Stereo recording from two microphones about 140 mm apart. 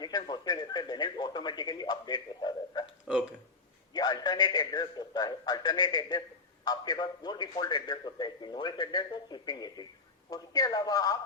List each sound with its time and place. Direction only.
0.0 s speech: 30° left (ahead or behind)
3.9 s a man's voice: 30° left (ahead or behind)